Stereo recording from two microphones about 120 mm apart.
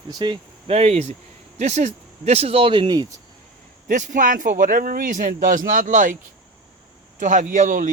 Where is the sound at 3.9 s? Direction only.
90° right.